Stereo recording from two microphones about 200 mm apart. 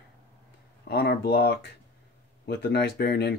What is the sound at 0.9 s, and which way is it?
Speech, 50° left (ahead or behind).